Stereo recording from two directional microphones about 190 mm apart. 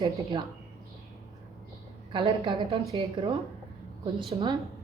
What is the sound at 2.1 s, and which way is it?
Speech, 25° right (ahead or behind).